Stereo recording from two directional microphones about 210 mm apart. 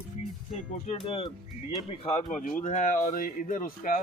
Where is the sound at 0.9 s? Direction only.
25° left (ahead or behind).